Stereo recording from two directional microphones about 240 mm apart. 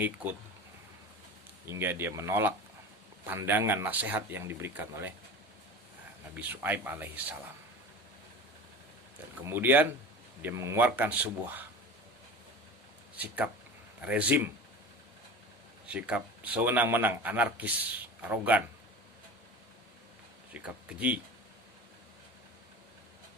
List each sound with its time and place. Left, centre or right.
1.6 s speech: centre
6.3 s speech: centre
9.4 s speech: centre
13.1 s speech: centre
15.9 s speech: centre